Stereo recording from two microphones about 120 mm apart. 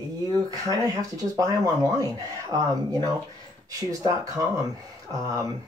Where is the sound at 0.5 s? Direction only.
30° right (ahead or behind).